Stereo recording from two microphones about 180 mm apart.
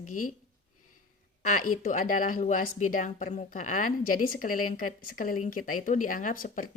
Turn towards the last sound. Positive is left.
turn(degrees=45)  # may be behind; listen again after turning